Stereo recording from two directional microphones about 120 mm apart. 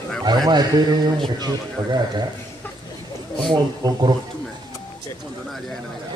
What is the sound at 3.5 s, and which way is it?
Speech, 35° right (ahead or behind).